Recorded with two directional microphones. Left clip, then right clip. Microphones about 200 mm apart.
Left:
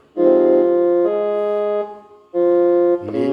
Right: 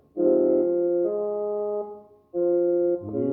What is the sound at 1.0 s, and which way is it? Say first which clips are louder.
Keyboard: left 8 dB; 45° left (ahead or behind).